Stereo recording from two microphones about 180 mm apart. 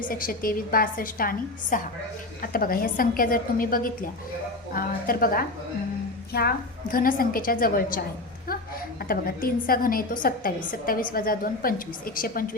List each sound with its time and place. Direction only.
0.1 s a woman's voice: 55° left (ahead or behind)
9.0 s a woman's voice: 55° left (ahead or behind)